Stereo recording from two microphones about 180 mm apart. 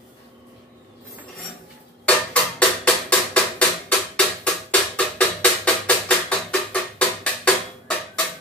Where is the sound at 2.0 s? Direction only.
5° left (ahead or behind).